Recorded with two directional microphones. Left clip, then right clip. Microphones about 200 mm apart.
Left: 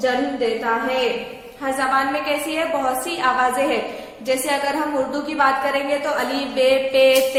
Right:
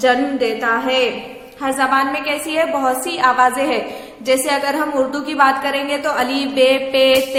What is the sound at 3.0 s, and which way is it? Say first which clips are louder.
A woman's voice: right 7 dB; 25° right (ahead or behind).